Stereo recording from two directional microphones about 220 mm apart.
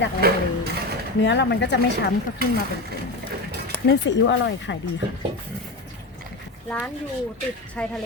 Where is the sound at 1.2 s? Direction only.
55° left (ahead or behind).